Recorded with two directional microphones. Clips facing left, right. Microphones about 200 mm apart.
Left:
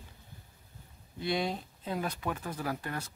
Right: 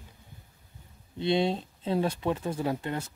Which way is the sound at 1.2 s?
25° right (ahead or behind).